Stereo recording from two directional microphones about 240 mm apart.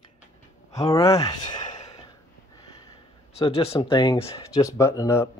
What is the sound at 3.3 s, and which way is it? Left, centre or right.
Speech, left.